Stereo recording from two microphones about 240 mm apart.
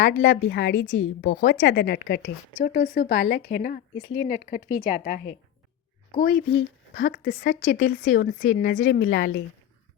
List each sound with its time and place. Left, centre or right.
0.2 s speech: left
1.3 s a woman's voice: left
1.6 s a woman's voice: left
6.2 s speech: left
7.0 s speech: left
8.8 s speech: left